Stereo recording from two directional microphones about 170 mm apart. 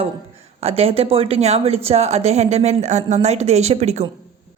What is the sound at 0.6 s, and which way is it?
A woman's voice, 35° right (ahead or behind).